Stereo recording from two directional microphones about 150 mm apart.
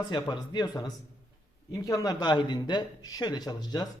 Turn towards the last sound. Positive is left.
turn(degrees=25)  # may be behind; listen again after turning